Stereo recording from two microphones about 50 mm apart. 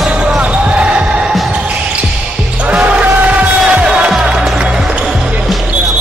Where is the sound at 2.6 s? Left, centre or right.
Right.